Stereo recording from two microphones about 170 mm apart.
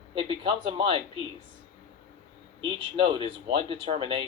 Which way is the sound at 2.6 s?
30° right (ahead or behind).